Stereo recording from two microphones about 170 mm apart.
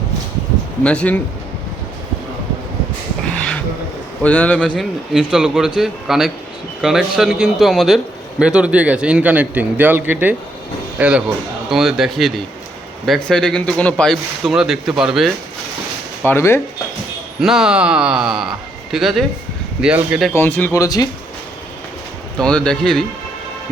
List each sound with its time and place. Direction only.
0.9 s speech: 5° left (ahead or behind)
4.2 s a man's voice: 10° left (ahead or behind)
16.2 s speech: 15° left (ahead or behind)
17.4 s speech: 5° right (ahead or behind)
20.3 s speech: 15° left (ahead or behind)
22.4 s speech: 5° left (ahead or behind)